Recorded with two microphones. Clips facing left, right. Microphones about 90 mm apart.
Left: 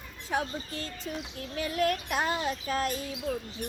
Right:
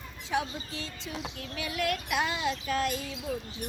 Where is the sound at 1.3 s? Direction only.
40° left (ahead or behind).